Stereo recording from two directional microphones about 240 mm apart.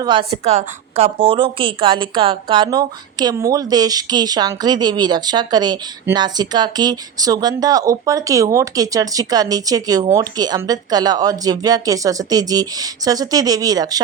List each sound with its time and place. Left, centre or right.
0.0 s a woman's voice: centre